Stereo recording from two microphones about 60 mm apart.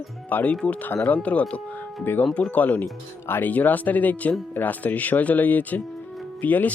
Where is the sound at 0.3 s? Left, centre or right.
Left.